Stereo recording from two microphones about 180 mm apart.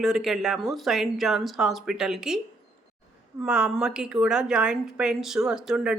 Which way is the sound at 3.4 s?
5° right (ahead or behind).